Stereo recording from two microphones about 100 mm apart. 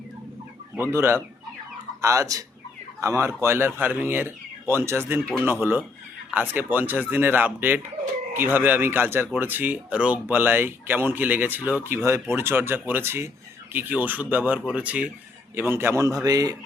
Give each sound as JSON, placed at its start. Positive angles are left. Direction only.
{"t": 0.8, "sound": "speech", "side_deg": -25}